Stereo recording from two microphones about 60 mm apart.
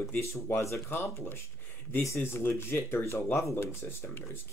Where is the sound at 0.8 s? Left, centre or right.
Left.